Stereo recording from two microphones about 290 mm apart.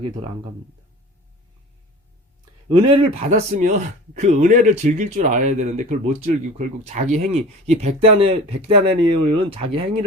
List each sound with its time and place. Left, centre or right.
2.6 s speech: right